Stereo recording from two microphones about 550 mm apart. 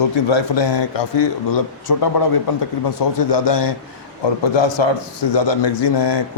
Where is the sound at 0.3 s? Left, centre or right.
Left.